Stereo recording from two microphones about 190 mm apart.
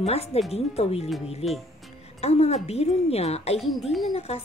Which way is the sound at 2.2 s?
35° left (ahead or behind).